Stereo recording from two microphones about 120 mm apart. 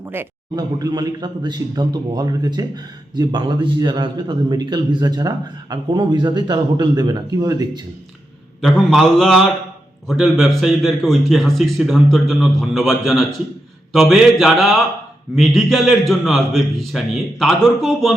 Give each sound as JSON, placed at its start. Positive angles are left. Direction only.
{"t": 0.0, "sound": "a man's voice", "side_deg": -20}
{"t": 0.5, "sound": "speech", "side_deg": -35}
{"t": 8.6, "sound": "a man's voice", "side_deg": 5}